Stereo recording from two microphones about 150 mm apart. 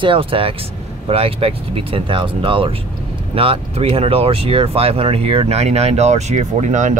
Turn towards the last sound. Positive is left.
turn(degrees=-55)  # may be behind; listen again after turning